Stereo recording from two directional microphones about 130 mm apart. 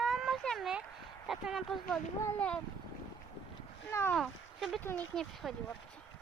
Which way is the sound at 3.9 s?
20° left (ahead or behind).